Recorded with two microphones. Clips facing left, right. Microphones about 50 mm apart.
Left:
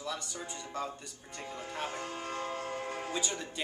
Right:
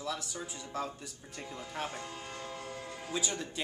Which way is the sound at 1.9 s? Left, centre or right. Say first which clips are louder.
Left 4 dB; left.